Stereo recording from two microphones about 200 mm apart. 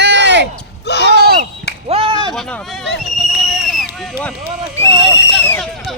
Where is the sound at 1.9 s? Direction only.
30° right (ahead or behind).